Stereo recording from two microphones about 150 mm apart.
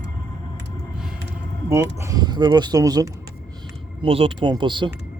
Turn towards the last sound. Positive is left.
turn(degrees=-30)  # may be behind; listen again after turning